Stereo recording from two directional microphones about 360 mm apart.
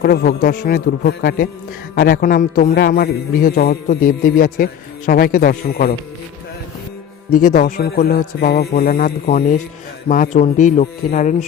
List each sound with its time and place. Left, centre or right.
0.0 s a man's voice: left
7.3 s a man's voice: left